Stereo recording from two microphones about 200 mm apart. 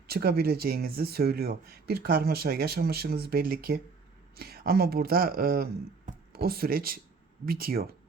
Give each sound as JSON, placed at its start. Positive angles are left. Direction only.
{"t": 0.1, "sound": "speech", "side_deg": -50}
{"t": 6.1, "sound": "a sound", "side_deg": -50}
{"t": 7.4, "sound": "speech", "side_deg": -45}